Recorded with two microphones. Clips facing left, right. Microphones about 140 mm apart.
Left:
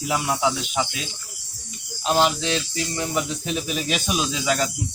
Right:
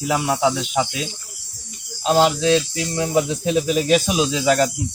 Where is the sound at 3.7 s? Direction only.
35° right (ahead or behind).